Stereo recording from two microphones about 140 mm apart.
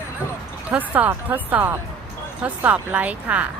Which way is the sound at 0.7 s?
10° right (ahead or behind).